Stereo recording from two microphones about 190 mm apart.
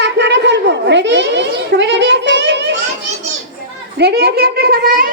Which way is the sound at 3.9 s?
55° right (ahead or behind).